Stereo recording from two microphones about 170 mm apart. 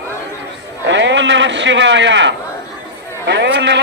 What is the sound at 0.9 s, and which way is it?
A man's voice, 90° right.